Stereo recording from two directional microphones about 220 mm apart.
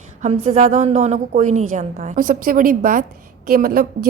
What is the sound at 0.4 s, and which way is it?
A woman's voice, 30° right (ahead or behind).